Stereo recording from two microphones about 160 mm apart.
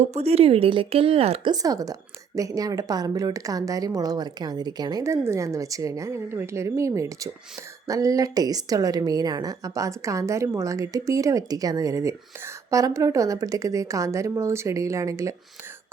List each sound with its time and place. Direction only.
0.0 s a woman's voice: 40° right (ahead or behind)
1.5 s a woman's voice: 25° right (ahead or behind)